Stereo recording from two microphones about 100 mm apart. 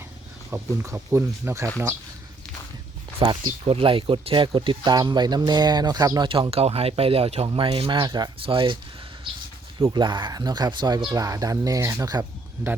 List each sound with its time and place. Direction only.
0.5 s speech: 25° right (ahead or behind)
3.2 s speech: 55° right (ahead or behind); by 6.2 s 40° right (ahead or behind)
6.2 s speech: 60° right (ahead or behind); by 7.4 s 85° right
7.4 s speech: 65° right (ahead or behind); by 8.3 s 45° right (ahead or behind)
8.4 s speech: 60° right (ahead or behind)
9.9 s speech: 50° right (ahead or behind)
11.1 s speech: 35° right (ahead or behind)